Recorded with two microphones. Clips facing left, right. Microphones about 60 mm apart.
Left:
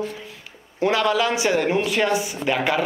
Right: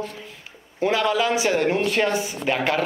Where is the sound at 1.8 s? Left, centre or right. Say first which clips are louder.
Left 1 dB; right.